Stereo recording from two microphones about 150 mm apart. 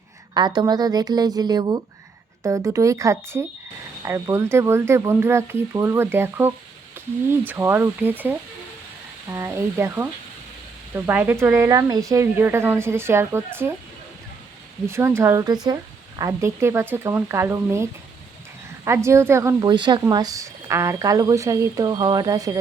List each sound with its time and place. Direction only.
0.3 s speech: 30° right (ahead or behind)
14.8 s speech: 20° right (ahead or behind)
18.9 s speech: 20° right (ahead or behind)
19.6 s speech: 30° right (ahead or behind)